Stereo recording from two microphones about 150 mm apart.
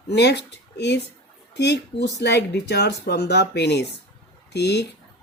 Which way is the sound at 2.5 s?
90° left.